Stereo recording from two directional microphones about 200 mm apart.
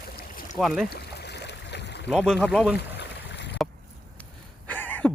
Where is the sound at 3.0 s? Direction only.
60° left (ahead or behind).